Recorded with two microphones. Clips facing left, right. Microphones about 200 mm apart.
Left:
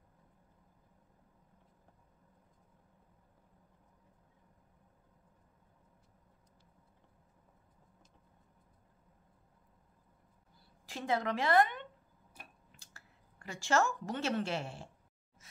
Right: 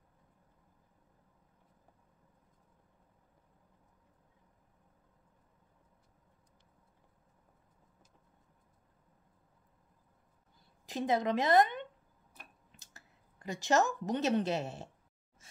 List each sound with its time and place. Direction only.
10.9 s a woman's voice: 20° right (ahead or behind)